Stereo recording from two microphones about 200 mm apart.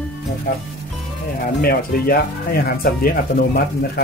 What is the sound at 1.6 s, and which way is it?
Speech, 50° left (ahead or behind).